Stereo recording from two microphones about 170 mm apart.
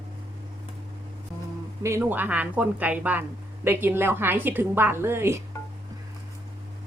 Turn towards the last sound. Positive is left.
turn(degrees=20)  # may be behind; listen again after turning